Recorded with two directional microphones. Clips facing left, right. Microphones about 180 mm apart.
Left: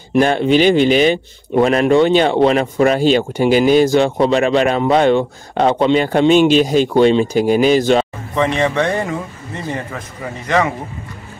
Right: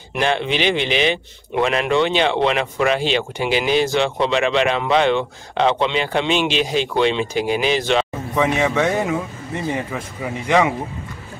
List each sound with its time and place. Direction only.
0.1 s speech: 40° left (ahead or behind)
8.4 s a man's voice: 10° right (ahead or behind)